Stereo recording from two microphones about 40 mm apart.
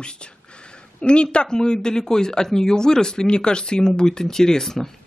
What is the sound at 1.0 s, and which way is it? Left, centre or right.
Speech, left.